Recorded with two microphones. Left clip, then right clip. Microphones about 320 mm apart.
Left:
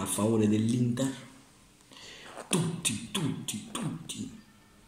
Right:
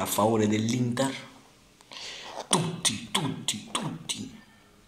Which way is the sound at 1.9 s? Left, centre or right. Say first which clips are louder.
Right 8 dB; centre.